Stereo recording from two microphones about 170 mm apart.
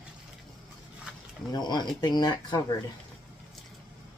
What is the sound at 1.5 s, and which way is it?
Speech, 25° left (ahead or behind).